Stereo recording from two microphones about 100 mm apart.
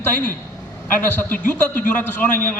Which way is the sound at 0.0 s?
20° left (ahead or behind).